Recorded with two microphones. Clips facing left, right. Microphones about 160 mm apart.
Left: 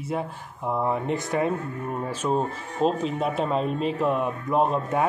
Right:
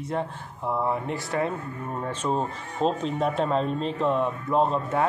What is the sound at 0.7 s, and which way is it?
Music, 20° left (ahead or behind).